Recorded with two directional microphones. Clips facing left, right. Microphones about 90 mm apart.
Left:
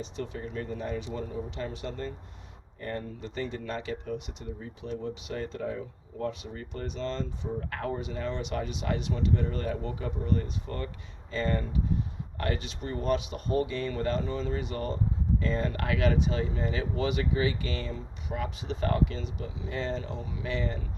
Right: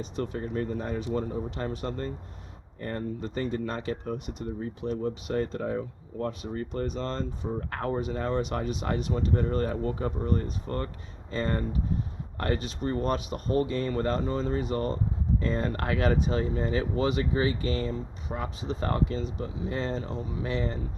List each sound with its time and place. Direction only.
0.0 s speech: 45° right (ahead or behind)